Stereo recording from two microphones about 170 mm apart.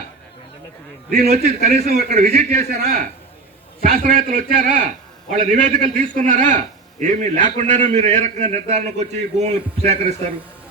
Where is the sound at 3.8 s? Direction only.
55° right (ahead or behind); by 10.2 s 40° right (ahead or behind).